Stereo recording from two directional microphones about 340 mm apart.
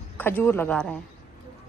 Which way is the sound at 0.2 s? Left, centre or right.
Centre.